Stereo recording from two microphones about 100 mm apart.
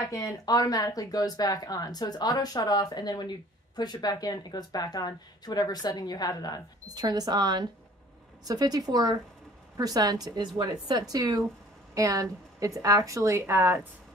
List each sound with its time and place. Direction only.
0.1 s speech: 35° left (ahead or behind)
6.9 s a woman's voice: 40° right (ahead or behind); by 13.8 s 25° right (ahead or behind)